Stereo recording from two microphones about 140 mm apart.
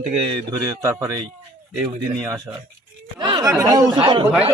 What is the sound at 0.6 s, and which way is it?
Speech, 25° right (ahead or behind).